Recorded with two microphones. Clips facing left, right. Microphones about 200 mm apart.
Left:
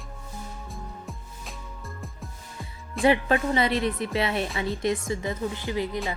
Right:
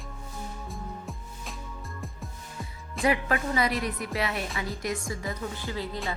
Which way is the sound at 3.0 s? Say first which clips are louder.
Left 5 dB; 30° left (ahead or behind).